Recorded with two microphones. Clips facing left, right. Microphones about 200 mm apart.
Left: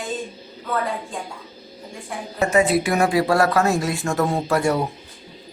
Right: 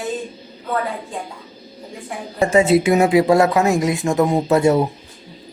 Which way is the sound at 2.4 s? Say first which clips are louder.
Right 4 dB; 25° right (ahead or behind).